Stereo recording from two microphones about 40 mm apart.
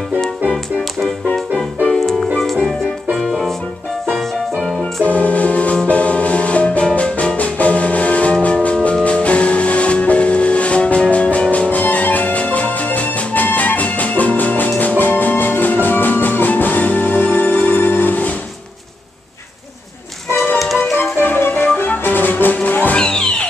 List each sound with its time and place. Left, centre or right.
1.9 s music: centre
5.0 s music: left
20.5 s music: centre
20.9 s music: left
22.9 s music: centre